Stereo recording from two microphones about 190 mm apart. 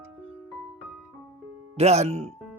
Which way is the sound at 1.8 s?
35° right (ahead or behind).